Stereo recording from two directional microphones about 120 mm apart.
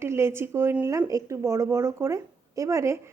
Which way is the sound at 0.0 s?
20° right (ahead or behind).